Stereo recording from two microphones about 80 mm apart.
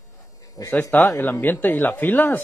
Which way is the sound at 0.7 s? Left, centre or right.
Left.